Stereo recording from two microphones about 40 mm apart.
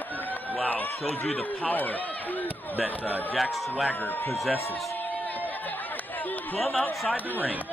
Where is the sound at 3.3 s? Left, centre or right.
Centre.